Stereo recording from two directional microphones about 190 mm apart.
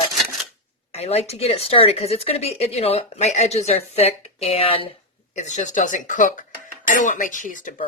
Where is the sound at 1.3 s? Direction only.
30° left (ahead or behind).